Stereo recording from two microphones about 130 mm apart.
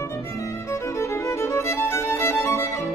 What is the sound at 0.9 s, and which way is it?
Music, 20° left (ahead or behind).